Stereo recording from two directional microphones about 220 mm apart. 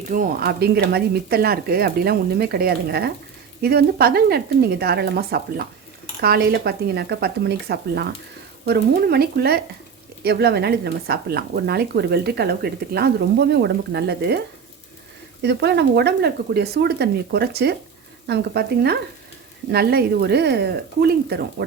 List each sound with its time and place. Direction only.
0.1 s speech: 40° right (ahead or behind)